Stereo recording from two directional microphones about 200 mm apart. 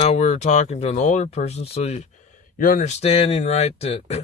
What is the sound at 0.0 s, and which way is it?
A man's voice, 35° left (ahead or behind).